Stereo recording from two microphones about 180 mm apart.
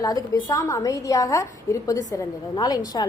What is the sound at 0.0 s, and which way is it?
A woman's voice, 20° left (ahead or behind).